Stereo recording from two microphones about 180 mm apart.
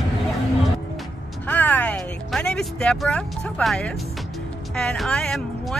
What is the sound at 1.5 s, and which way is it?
Music, 10° left (ahead or behind).